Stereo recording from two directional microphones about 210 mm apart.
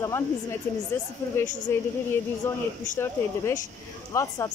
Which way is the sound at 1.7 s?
10° left (ahead or behind).